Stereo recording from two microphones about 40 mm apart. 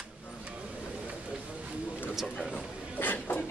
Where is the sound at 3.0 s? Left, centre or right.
Left.